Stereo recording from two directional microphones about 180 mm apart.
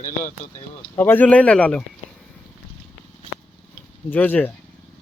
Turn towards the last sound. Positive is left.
turn(degrees=10)  # may be behind; listen again after turning